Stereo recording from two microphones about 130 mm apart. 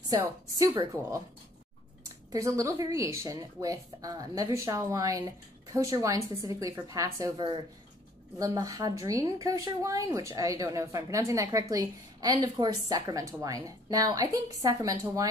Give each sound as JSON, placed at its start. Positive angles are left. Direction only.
{"t": 2.3, "sound": "a woman's voice", "side_deg": -25}
{"t": 7.3, "sound": "a woman's voice", "side_deg": -35}
{"t": 8.4, "sound": "a woman's voice", "side_deg": -25}